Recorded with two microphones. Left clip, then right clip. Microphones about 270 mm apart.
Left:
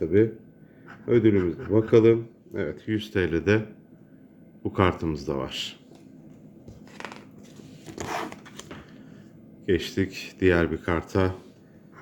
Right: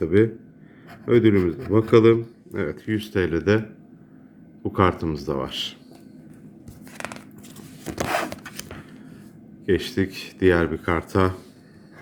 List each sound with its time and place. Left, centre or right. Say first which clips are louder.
1.0 s speech: right 3 dB; centre
4.6 s speech: right 3 dB; centre
6.9 s a sound: right 5 dB; right
7.9 s zipper: right 7 dB; centre
9.6 s speech: right 3 dB; centre